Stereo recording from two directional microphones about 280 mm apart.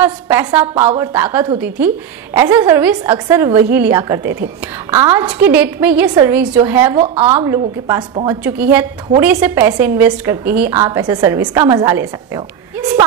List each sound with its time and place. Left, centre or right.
0.0 s a woman's voice: centre
7.0 s a woman's voice: right